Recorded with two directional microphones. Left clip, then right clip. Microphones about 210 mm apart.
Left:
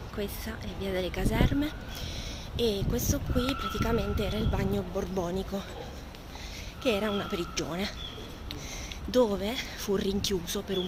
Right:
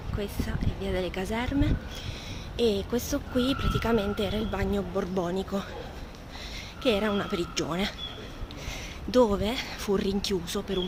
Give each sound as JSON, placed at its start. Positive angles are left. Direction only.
{"t": 0.2, "sound": "speech", "side_deg": 0}
{"t": 2.6, "sound": "speech", "side_deg": -20}
{"t": 6.8, "sound": "speech", "side_deg": -15}
{"t": 9.1, "sound": "speech", "side_deg": -15}